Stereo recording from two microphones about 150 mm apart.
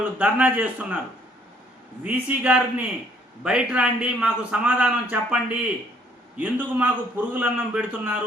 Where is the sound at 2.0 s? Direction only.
10° right (ahead or behind).